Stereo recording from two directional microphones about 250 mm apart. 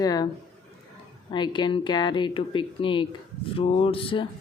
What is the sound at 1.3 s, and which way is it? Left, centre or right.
Speech, centre.